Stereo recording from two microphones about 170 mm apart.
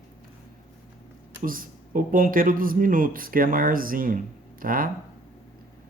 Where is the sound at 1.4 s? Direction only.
55° right (ahead or behind).